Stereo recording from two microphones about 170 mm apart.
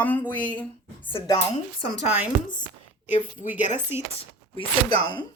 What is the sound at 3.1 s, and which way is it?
Speech, 50° left (ahead or behind).